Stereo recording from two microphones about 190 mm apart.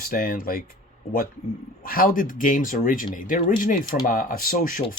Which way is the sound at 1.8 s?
50° left (ahead or behind).